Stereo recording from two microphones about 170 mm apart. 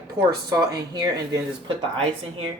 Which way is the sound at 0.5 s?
20° right (ahead or behind).